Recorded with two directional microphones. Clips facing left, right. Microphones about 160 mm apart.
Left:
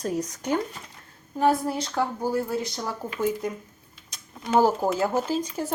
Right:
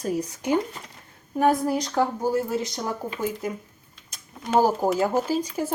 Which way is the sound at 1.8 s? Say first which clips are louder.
Right 3 dB; 15° right (ahead or behind).